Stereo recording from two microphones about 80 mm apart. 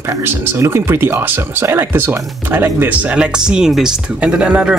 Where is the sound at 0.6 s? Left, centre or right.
Right.